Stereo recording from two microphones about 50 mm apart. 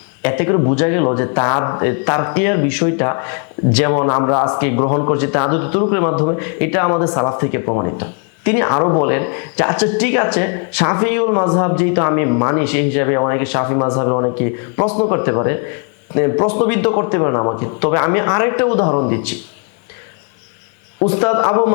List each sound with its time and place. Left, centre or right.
0.2 s speech: left
21.0 s speech: left